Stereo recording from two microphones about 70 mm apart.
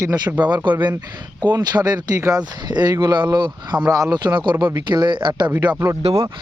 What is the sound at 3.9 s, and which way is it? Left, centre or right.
Speech, right.